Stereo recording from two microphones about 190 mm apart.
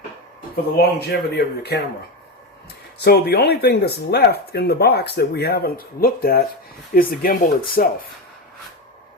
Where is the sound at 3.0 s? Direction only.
60° left (ahead or behind).